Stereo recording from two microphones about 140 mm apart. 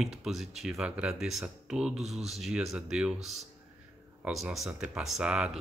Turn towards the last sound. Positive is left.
turn(degrees=-5)  # may be behind; listen again after turning